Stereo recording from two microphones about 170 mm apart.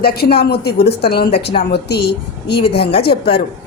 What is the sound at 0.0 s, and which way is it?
Speech, 65° left (ahead or behind).